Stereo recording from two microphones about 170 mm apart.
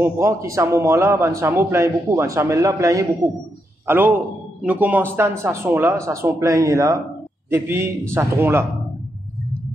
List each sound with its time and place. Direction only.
0.0 s a man's voice: 15° right (ahead or behind)